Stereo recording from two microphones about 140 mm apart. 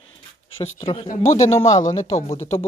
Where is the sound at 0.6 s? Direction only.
40° left (ahead or behind).